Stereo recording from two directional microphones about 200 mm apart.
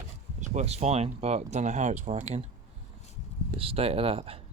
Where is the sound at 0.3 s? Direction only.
35° right (ahead or behind).